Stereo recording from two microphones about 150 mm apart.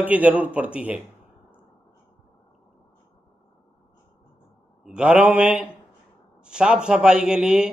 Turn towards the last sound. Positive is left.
turn(degrees=-5)  # may be behind; listen again after turning